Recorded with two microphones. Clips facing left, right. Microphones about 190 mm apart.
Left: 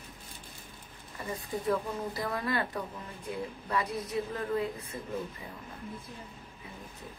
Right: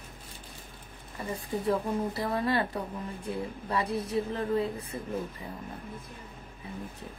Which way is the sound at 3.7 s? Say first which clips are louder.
Right 3 dB; 30° right (ahead or behind).